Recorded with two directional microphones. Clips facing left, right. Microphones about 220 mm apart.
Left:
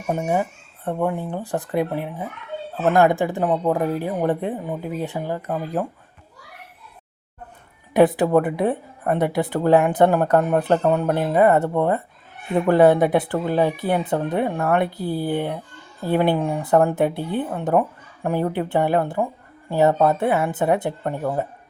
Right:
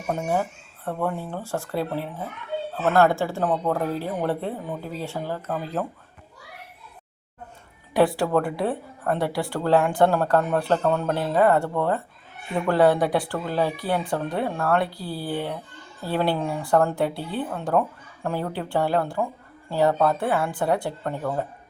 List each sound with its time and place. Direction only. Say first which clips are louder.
0.1 s speech: left 3 dB; 15° left (ahead or behind)
7.9 s a child's voice: left 5 dB; 20° left (ahead or behind)